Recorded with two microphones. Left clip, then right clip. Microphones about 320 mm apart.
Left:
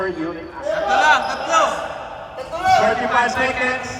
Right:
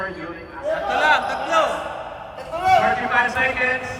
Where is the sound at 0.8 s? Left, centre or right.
Centre.